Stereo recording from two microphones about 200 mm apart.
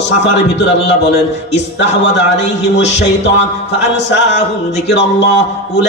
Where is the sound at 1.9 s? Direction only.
60° left (ahead or behind).